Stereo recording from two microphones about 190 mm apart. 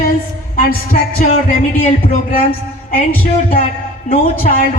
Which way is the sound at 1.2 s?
45° left (ahead or behind).